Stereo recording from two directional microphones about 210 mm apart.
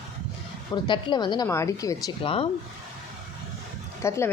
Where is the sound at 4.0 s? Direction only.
15° left (ahead or behind).